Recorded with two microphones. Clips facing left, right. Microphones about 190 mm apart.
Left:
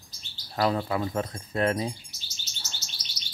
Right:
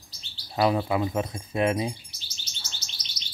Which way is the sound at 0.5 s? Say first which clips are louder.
Right 3 dB; 15° right (ahead or behind).